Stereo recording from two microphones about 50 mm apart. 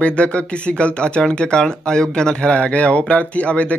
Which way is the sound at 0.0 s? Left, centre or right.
Left.